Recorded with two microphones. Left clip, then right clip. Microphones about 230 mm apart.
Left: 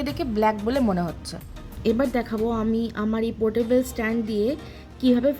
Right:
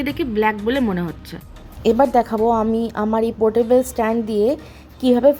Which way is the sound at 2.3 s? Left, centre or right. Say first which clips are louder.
Right 9 dB; right.